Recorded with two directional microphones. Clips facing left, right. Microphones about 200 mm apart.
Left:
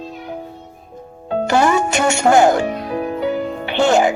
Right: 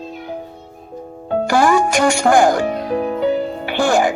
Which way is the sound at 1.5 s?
25° left (ahead or behind).